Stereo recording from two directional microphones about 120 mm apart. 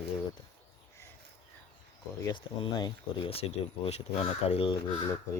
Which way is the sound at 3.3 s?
55° left (ahead or behind).